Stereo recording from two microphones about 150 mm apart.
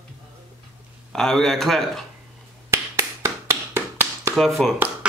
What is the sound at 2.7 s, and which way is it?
Tap, 15° right (ahead or behind).